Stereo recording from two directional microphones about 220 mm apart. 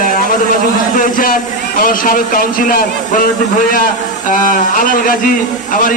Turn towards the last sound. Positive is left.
turn(degrees=40)  # may be behind; listen again after turning